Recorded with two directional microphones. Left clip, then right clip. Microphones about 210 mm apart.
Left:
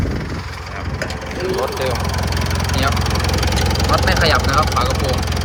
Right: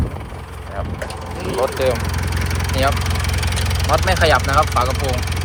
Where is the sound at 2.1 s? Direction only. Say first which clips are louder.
Left 3 dB; 50° left (ahead or behind).